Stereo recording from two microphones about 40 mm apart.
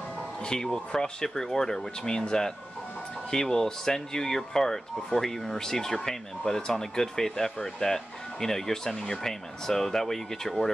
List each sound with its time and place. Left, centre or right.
0.5 s speech: centre